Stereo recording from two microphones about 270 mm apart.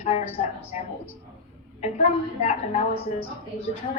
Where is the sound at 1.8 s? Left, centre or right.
Left.